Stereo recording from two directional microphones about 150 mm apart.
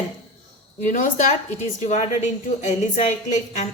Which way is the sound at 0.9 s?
55° left (ahead or behind).